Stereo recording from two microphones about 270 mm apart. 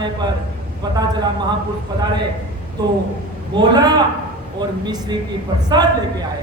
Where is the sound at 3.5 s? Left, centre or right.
Centre.